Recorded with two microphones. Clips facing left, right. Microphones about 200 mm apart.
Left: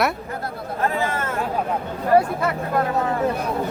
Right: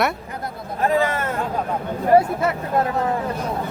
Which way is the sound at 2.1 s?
25° right (ahead or behind).